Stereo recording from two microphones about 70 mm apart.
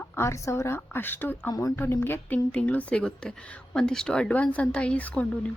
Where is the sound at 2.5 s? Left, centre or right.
Centre.